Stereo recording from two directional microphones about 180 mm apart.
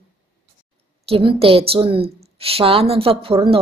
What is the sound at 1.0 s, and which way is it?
A woman's voice, 30° right (ahead or behind).